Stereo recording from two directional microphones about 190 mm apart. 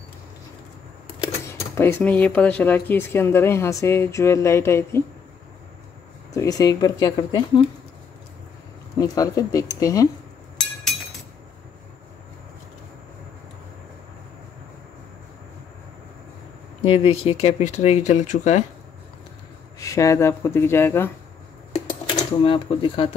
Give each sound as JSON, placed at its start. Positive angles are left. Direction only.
{"t": 1.5, "sound": "speech", "side_deg": 10}
{"t": 6.3, "sound": "speech", "side_deg": 15}
{"t": 8.9, "sound": "speech", "side_deg": 20}
{"t": 16.8, "sound": "speech", "side_deg": 30}
{"t": 19.8, "sound": "speech", "side_deg": 15}
{"t": 22.1, "sound": "speech", "side_deg": 30}